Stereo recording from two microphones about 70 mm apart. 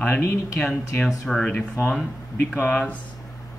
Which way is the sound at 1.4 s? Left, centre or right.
Left.